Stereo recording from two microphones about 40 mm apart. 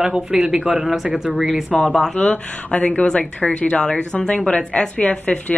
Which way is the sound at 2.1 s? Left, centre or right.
Left.